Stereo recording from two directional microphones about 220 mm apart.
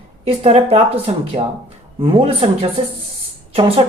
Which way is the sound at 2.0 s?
25° right (ahead or behind).